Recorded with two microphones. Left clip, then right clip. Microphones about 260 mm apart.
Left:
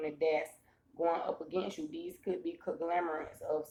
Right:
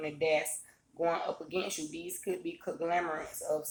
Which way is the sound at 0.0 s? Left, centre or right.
Centre.